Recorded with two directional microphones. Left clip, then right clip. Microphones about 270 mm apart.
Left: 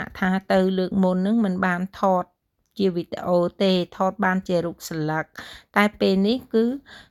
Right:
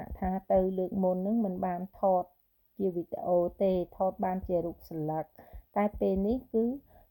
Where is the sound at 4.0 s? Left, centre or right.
Left.